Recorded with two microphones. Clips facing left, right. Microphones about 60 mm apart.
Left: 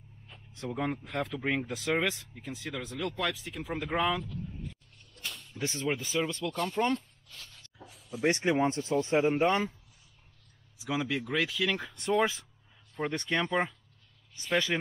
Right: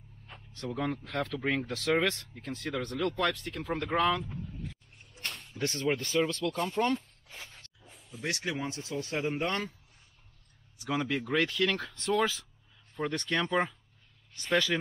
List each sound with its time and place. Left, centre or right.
0.5 s speech: centre
4.6 s a sound: centre
5.6 s speech: centre
7.2 s a sound: right
7.8 s a sound: centre
8.3 s speech: left
10.8 s speech: centre; by 13.5 s left
13.5 s speech: centre
14.4 s speech: centre